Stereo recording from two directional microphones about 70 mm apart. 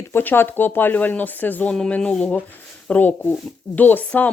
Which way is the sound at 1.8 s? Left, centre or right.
Centre.